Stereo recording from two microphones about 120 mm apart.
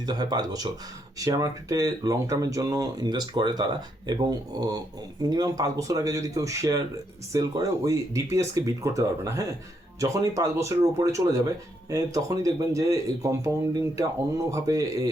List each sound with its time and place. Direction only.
0.0 s speech: 35° right (ahead or behind)